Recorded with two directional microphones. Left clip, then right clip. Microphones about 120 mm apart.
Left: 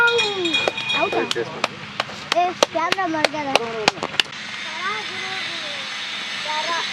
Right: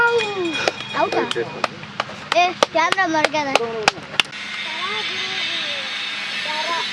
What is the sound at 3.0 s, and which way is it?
Speech, 40° right (ahead or behind).